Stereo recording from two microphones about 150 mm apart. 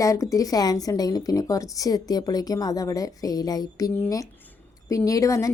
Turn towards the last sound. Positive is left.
turn(degrees=20)  # may be behind; listen again after turning